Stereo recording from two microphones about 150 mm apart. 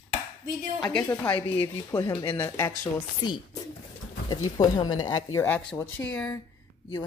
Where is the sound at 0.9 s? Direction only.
10° left (ahead or behind).